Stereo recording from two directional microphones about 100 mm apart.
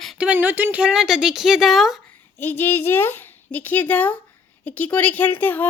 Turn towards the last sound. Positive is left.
turn(degrees=20)  # may be behind; listen again after turning